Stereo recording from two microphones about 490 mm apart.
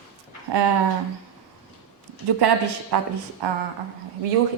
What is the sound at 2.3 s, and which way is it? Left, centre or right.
A woman's voice, right.